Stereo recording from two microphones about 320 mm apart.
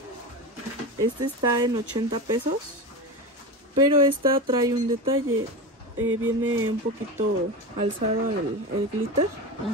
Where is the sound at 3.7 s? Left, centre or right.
Centre.